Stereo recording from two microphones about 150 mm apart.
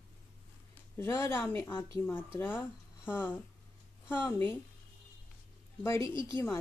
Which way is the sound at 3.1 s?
15° left (ahead or behind).